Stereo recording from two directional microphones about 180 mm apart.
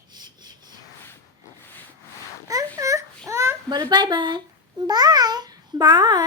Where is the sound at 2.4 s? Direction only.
20° right (ahead or behind).